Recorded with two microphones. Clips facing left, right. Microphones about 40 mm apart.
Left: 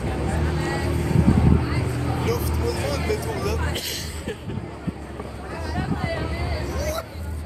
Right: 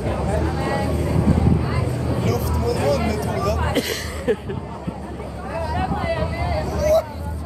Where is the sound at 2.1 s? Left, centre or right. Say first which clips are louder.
Right 3 dB; centre.